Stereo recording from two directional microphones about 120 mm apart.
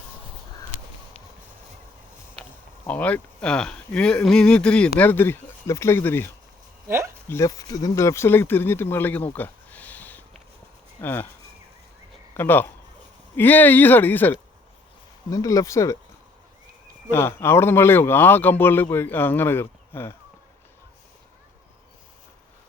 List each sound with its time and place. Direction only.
2.8 s speech: 10° left (ahead or behind)
6.8 s speech: 25° right (ahead or behind)
7.3 s speech: 25° left (ahead or behind)
12.3 s speech: 20° left (ahead or behind)
15.3 s speech: 30° left (ahead or behind)
17.1 s speech: 20° left (ahead or behind)